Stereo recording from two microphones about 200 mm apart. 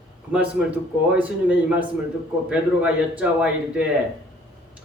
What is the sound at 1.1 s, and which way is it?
A woman's voice, 5° right (ahead or behind).